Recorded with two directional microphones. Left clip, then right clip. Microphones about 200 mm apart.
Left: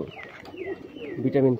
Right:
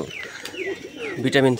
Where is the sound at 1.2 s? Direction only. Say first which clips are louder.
Right 4 dB; 40° right (ahead or behind).